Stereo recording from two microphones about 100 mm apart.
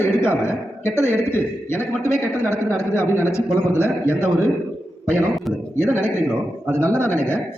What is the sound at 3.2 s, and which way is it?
Speech, 25° left (ahead or behind).